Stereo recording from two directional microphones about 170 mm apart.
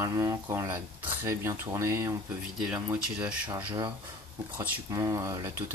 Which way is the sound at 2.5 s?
5° right (ahead or behind).